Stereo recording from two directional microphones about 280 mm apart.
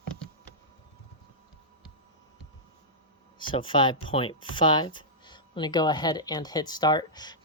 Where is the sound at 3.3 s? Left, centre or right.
Centre.